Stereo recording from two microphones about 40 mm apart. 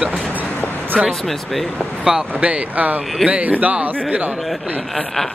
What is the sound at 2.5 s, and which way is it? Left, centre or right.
Speech, right.